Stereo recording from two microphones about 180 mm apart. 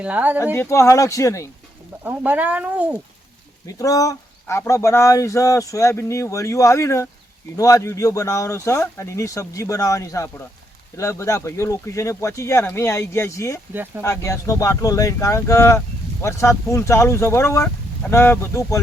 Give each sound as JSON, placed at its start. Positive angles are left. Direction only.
{"t": 0.0, "sound": "speech", "side_deg": -10}
{"t": 0.5, "sound": "speech", "side_deg": 15}
{"t": 2.0, "sound": "speech", "side_deg": -10}
{"t": 3.7, "sound": "speech", "side_deg": 20}